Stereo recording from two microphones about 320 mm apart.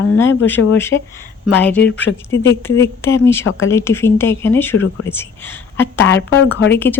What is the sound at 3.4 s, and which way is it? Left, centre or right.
Speech, left.